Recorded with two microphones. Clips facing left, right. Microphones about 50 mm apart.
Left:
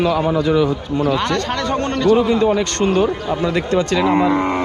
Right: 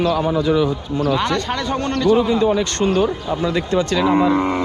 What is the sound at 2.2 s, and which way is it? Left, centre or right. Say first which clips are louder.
Speech: left 1 dB; left.